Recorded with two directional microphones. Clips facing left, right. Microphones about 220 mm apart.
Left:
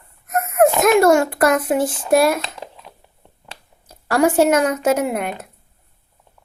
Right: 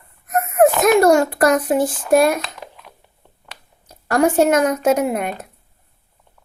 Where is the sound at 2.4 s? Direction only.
30° left (ahead or behind).